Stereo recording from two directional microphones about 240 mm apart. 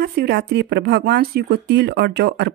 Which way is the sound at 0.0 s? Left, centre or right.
Right.